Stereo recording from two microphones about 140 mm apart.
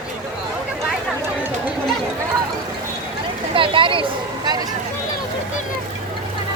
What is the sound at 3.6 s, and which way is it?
Speech, 40° right (ahead or behind).